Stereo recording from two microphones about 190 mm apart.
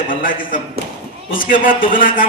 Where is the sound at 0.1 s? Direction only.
45° left (ahead or behind).